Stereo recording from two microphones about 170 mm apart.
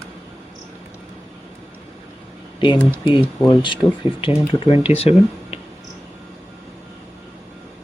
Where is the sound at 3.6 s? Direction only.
30° left (ahead or behind).